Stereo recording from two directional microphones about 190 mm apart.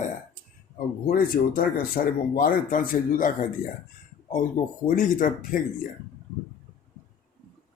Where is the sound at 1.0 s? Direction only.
50° left (ahead or behind).